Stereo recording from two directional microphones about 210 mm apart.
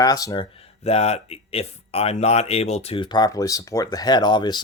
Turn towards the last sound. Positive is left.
turn(degrees=20)  # may be behind; listen again after turning